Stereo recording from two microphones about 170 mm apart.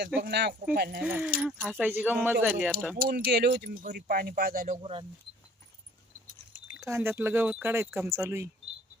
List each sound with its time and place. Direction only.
0.2 s speech: 75° right (ahead or behind); by 1.0 s 60° right (ahead or behind)
1.0 s speech: 10° right (ahead or behind)
3.0 s speech: 60° right (ahead or behind)
4.8 s speech: 30° right (ahead or behind)
6.7 s speech: 15° right (ahead or behind)